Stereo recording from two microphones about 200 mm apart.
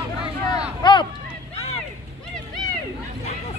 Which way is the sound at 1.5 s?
30° left (ahead or behind).